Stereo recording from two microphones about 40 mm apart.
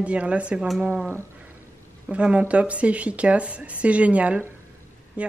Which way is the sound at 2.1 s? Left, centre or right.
Right.